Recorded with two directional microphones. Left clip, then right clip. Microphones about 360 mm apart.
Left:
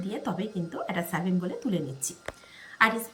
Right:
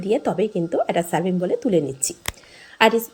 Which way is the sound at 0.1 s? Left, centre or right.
Right.